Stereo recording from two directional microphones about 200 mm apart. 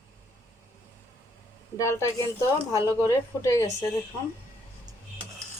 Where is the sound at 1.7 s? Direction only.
15° left (ahead or behind).